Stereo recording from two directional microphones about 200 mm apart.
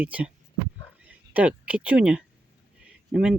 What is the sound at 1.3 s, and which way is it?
Speech, 5° right (ahead or behind).